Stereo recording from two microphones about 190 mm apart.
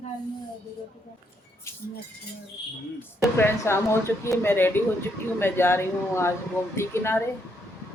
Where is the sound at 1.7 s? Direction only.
15° left (ahead or behind).